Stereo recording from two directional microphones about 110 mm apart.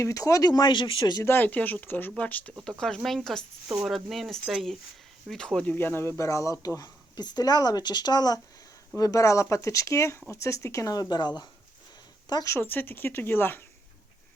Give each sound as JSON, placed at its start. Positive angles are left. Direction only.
{"t": 0.0, "sound": "speech", "side_deg": 30}
{"t": 1.2, "sound": "speech", "side_deg": 20}
{"t": 5.7, "sound": "speech", "side_deg": 20}
{"t": 12.5, "sound": "speech", "side_deg": 20}